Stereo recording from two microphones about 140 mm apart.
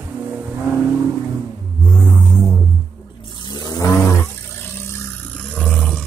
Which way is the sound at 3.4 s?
30° left (ahead or behind).